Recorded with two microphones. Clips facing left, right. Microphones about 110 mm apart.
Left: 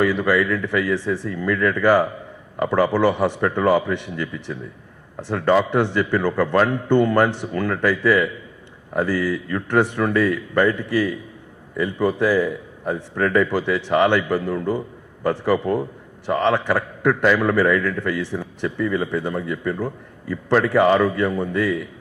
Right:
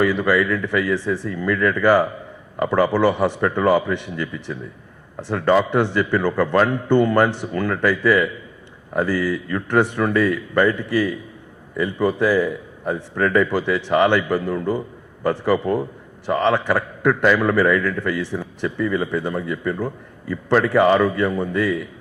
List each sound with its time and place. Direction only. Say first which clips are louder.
0.0 s speech: right 1 dB; 25° right (ahead or behind)